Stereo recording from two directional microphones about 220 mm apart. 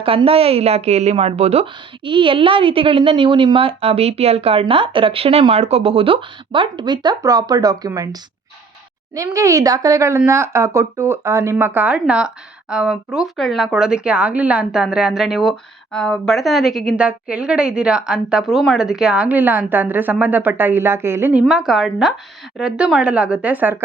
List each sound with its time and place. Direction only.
0.0 s a woman's voice: 25° right (ahead or behind); by 23.8 s 10° right (ahead or behind)